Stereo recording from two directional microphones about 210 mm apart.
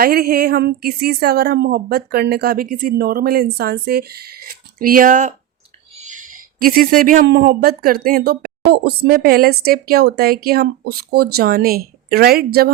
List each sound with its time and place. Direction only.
0.0 s speech: 45° right (ahead or behind)